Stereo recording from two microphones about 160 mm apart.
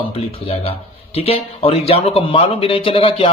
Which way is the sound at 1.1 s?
35° left (ahead or behind).